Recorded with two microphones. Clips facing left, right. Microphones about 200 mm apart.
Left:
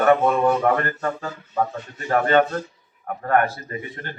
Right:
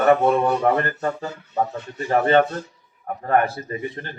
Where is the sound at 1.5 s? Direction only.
25° right (ahead or behind).